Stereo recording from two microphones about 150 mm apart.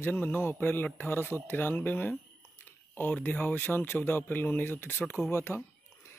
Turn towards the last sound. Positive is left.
turn(degrees=15)  # may be behind; listen again after turning